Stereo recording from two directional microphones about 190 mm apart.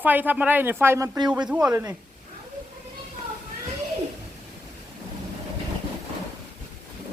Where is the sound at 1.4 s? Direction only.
5° right (ahead or behind).